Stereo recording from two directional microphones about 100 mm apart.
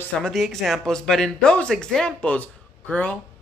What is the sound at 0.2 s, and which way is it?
Speech, centre (ahead or behind).